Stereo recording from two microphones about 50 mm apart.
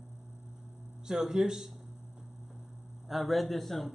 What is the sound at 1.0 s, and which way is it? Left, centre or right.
Speech, centre.